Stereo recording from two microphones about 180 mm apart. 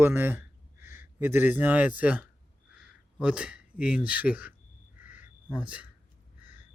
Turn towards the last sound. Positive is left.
turn(degrees=-5)  # may be behind; listen again after turning